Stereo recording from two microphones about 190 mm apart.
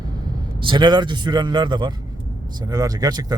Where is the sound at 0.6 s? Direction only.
25° right (ahead or behind).